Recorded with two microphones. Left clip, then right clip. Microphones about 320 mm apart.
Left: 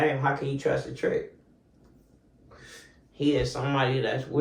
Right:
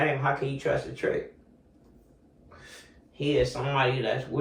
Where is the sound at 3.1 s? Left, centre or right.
Centre.